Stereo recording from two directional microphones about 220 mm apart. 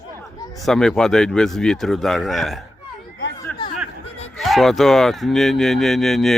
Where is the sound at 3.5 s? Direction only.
5° left (ahead or behind).